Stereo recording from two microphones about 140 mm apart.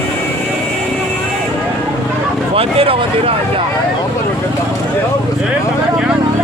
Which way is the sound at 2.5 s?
40° right (ahead or behind).